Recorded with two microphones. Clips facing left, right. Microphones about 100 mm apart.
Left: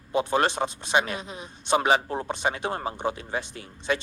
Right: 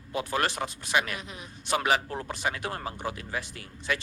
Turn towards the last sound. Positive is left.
turn(degrees=25)  # may be behind; listen again after turning